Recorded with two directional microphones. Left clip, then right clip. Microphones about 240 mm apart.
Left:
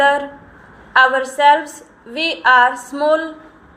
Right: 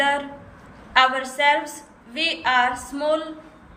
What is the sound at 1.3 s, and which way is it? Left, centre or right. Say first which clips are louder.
A woman's voice: left 7 dB; centre.